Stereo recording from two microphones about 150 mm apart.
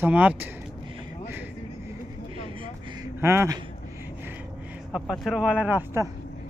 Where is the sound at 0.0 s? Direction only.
10° right (ahead or behind).